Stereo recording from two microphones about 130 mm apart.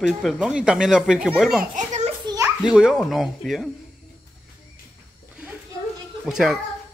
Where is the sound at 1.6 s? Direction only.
75° right (ahead or behind).